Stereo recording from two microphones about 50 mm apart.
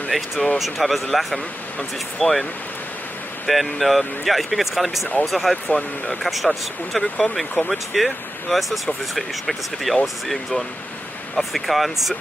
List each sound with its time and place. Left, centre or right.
0.1 s speech: centre
3.4 s speech: centre
5.7 s speech: centre
6.2 s speech: centre